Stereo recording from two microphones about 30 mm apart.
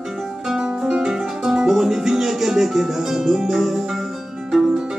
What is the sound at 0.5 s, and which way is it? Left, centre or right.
Music, centre.